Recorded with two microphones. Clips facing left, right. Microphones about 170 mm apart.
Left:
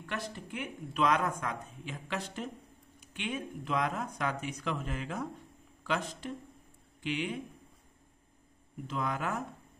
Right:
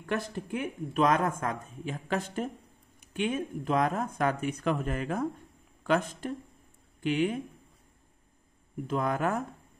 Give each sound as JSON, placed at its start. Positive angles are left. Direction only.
{"t": 0.0, "sound": "speech", "side_deg": -50}
{"t": 8.8, "sound": "speech", "side_deg": -50}